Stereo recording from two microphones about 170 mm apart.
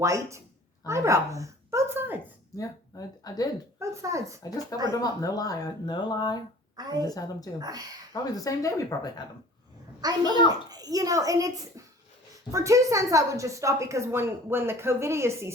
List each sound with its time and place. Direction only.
0.0 s a woman's voice: 15° right (ahead or behind)
2.6 s speech: 20° left (ahead or behind)
3.8 s a child's voice: 20° right (ahead or behind)
4.4 s speech: 20° left (ahead or behind)
7.6 s a child's voice: 25° right (ahead or behind)
8.1 s speech: 20° left (ahead or behind)
10.2 s speech: 25° left (ahead or behind)
10.7 s a child's voice: 20° right (ahead or behind)